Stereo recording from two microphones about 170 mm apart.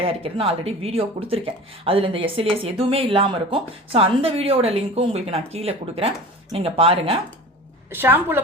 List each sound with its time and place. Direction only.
0.0 s speech: 35° right (ahead or behind)
7.9 s a woman's voice: 15° right (ahead or behind)